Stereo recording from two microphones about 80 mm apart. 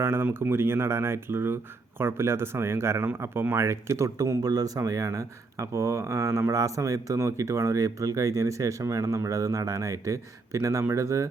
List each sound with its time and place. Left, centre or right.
0.0 s speech: right